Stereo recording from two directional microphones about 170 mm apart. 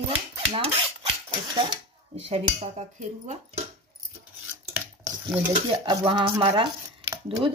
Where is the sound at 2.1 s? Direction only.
40° right (ahead or behind).